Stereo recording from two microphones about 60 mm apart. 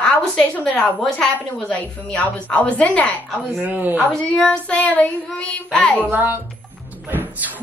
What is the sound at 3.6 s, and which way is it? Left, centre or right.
Speech, right.